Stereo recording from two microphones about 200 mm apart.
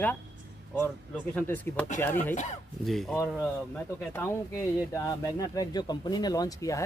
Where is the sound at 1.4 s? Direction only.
10° left (ahead or behind).